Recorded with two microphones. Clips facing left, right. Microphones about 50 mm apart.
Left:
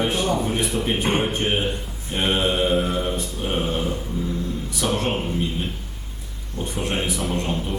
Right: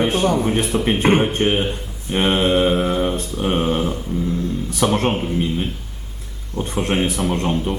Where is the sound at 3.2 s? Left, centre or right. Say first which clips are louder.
Right 5 dB; right.